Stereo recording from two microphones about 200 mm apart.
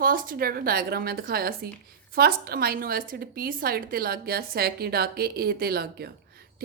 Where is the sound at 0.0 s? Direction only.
45° right (ahead or behind).